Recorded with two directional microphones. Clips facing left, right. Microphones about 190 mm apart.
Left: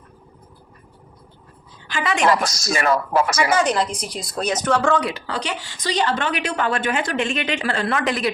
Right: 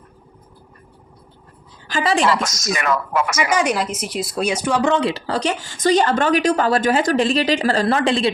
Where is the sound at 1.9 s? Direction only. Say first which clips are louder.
Right 2 dB; 35° right (ahead or behind).